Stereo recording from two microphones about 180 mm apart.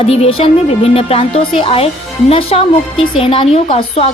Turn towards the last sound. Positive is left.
turn(degrees=30)  # may be behind; listen again after turning